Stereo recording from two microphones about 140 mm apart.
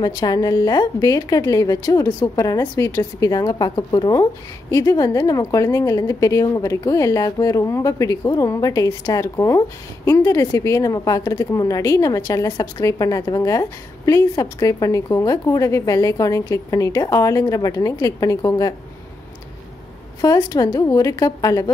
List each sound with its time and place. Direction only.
0.0 s speech: 30° left (ahead or behind)
20.2 s speech: 25° left (ahead or behind)